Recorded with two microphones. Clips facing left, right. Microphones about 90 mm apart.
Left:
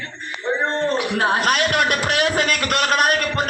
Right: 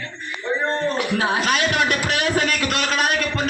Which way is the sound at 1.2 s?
50° left (ahead or behind).